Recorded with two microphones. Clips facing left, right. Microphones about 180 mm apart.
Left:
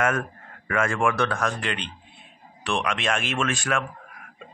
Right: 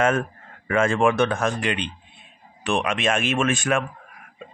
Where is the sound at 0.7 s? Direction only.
25° right (ahead or behind).